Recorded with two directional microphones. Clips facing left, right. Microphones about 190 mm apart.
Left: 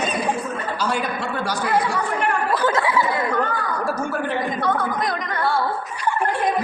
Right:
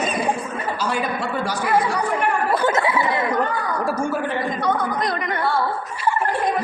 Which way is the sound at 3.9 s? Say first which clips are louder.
Right 3 dB; 10° right (ahead or behind).